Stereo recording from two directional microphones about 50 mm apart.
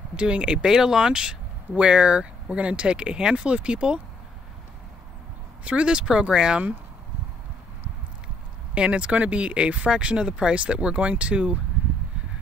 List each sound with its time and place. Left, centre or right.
0.1 s speech: right
5.6 s speech: right
8.7 s speech: right